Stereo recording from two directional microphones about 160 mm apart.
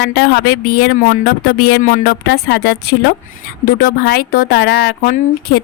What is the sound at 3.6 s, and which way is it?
A woman's voice, 65° left (ahead or behind).